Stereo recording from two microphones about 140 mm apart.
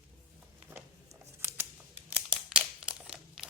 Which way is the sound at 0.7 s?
20° right (ahead or behind).